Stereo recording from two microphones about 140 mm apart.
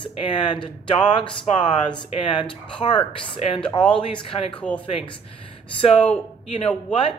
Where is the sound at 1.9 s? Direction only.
35° left (ahead or behind).